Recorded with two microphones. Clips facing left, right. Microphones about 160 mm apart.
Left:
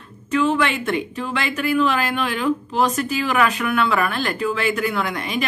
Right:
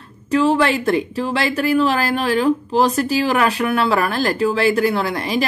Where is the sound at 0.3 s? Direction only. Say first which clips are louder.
Right 4 dB; 35° right (ahead or behind).